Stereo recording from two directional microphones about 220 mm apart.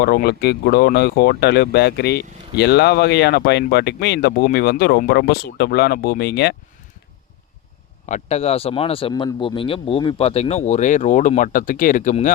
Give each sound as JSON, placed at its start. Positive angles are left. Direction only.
{"t": 0.0, "sound": "speech", "side_deg": 45}
{"t": 8.0, "sound": "speech", "side_deg": 30}